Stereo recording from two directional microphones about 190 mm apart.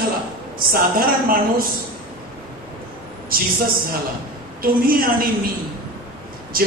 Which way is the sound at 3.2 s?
50° right (ahead or behind).